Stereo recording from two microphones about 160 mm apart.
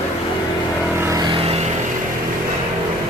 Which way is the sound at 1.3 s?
40° right (ahead or behind).